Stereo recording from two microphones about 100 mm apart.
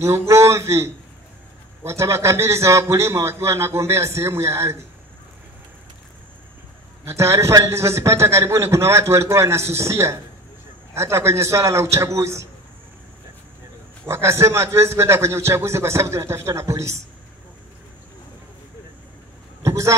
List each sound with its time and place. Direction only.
0.3 s a man's voice: 30° right (ahead or behind)
7.1 s a man's voice: 30° right (ahead or behind)
14.0 s a man's voice: 30° right (ahead or behind)
19.6 s a sound: 30° right (ahead or behind)